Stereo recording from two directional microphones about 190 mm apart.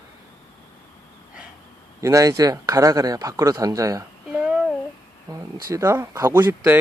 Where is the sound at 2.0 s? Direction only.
15° right (ahead or behind).